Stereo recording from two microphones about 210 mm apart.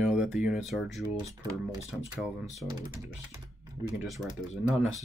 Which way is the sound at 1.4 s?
20° right (ahead or behind).